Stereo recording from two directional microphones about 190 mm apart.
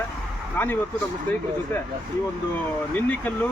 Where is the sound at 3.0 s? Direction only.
10° left (ahead or behind).